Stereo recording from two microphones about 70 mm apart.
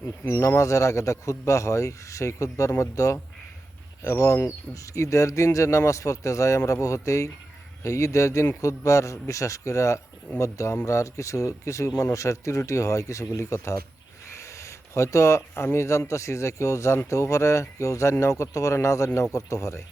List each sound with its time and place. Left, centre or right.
0.3 s a man's voice: left